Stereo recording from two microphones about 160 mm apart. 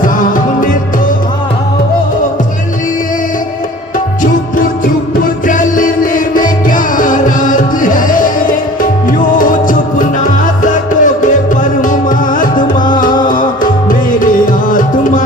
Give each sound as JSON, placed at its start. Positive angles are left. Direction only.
{"t": 0.0, "sound": "music", "side_deg": 55}
{"t": 4.2, "sound": "music", "side_deg": 60}